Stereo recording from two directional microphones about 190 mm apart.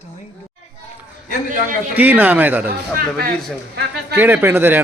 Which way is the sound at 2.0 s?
10° right (ahead or behind).